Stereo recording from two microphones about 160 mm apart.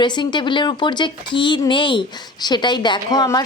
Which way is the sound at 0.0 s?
30° left (ahead or behind).